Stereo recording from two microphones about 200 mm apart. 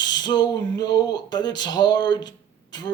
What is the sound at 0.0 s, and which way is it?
Speech, 20° left (ahead or behind).